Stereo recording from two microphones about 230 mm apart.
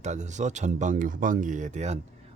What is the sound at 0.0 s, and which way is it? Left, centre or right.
Speech, right.